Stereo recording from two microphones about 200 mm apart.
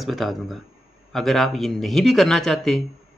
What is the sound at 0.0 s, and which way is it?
A man's voice, centre (ahead or behind).